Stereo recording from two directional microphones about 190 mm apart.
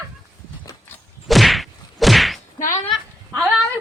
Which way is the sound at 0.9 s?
Centre (ahead or behind).